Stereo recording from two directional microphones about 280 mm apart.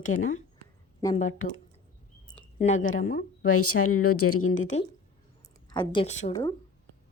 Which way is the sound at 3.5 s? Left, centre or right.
Left.